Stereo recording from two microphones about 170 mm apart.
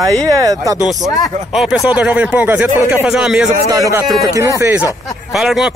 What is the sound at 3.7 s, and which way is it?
Speech, 20° right (ahead or behind).